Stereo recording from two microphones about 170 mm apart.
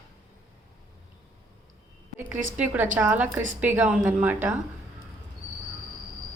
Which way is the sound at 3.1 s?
10° right (ahead or behind).